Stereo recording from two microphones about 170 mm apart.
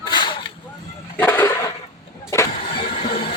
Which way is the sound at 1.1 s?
10° left (ahead or behind).